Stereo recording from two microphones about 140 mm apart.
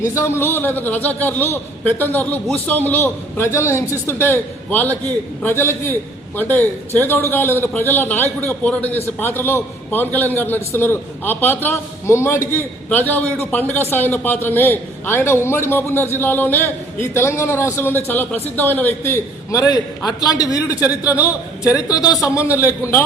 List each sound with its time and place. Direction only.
0.1 s a man's voice: 20° left (ahead or behind)